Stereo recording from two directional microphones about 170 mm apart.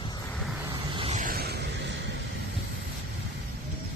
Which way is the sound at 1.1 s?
50° right (ahead or behind).